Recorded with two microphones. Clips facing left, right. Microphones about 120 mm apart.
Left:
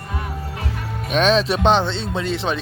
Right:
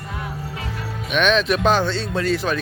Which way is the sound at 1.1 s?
35° left (ahead or behind).